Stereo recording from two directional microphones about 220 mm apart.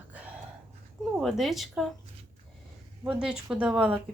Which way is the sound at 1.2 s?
Centre (ahead or behind).